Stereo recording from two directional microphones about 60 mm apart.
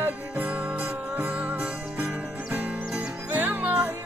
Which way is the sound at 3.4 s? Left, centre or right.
Right.